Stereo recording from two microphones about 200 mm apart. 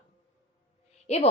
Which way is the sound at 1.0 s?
30° left (ahead or behind).